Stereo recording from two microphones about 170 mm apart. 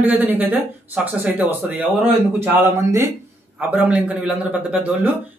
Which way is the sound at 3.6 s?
10° right (ahead or behind).